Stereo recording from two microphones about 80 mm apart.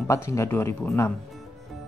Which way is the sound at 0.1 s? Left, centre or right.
Left.